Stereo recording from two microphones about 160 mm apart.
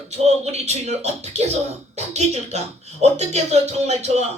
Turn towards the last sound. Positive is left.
turn(degrees=-45)  # may be behind; listen again after turning